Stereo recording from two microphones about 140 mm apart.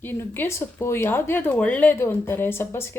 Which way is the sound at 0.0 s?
15° left (ahead or behind).